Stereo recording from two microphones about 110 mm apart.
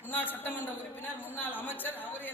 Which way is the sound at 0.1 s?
15° left (ahead or behind).